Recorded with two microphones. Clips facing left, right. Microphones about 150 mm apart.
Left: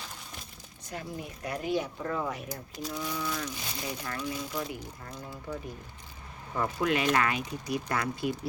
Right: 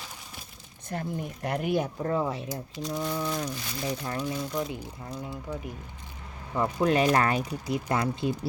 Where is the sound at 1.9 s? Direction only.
30° right (ahead or behind).